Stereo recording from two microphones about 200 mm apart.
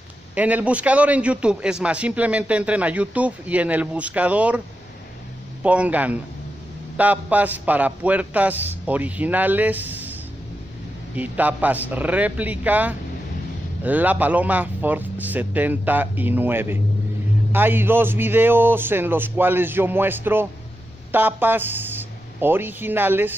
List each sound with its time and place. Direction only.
0.3 s a man's voice: 10° right (ahead or behind)
5.6 s a man's voice: 5° right (ahead or behind)
11.1 s a man's voice: 10° right (ahead or behind)